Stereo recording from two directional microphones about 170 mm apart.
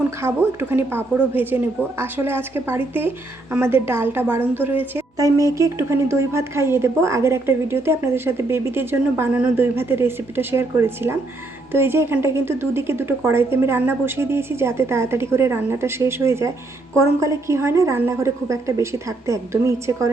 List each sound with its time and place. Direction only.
0.2 s a woman's voice: 15° right (ahead or behind)